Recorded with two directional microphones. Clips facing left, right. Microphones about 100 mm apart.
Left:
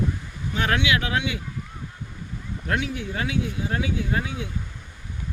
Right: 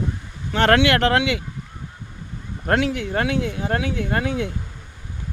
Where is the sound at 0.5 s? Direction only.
75° right (ahead or behind).